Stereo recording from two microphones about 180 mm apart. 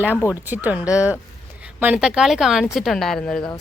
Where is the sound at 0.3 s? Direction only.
10° right (ahead or behind).